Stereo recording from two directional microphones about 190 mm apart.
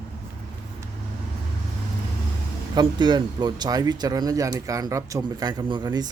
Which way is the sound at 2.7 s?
25° right (ahead or behind).